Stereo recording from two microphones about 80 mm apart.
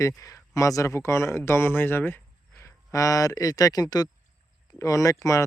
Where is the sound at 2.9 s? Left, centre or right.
Left.